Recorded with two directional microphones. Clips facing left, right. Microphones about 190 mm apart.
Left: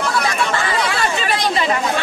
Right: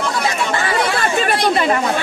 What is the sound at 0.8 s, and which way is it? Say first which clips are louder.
Speech: right 2 dB; 50° right (ahead or behind).